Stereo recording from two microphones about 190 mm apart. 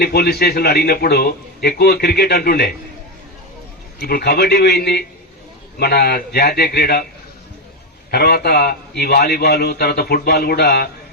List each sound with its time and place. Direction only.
0.0 s a man's voice: 55° left (ahead or behind)
4.0 s a man's voice: 55° left (ahead or behind)
8.1 s a man's voice: 55° left (ahead or behind)